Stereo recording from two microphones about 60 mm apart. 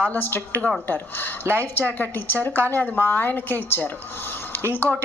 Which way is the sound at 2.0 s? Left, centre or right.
Left.